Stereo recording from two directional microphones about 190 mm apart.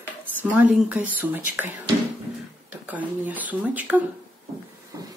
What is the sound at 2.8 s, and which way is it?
A woman's voice, 10° right (ahead or behind).